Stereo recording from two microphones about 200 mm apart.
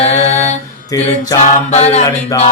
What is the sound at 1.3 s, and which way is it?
Mantra, 20° left (ahead or behind).